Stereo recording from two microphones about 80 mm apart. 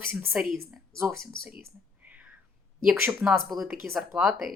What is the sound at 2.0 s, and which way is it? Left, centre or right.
Whispering, centre.